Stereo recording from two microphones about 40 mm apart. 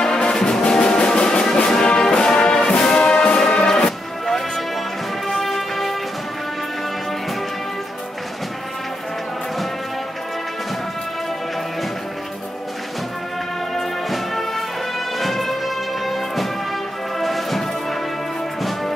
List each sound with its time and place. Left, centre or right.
0.0 s brass instrument: centre
5.4 s music: centre
14.0 s music: centre